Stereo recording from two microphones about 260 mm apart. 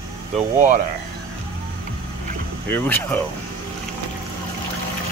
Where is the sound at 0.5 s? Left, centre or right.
Right.